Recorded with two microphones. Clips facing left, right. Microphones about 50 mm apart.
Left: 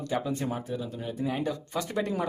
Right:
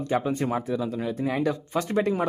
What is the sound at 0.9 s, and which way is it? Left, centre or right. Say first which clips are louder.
Speech: right 5 dB; right.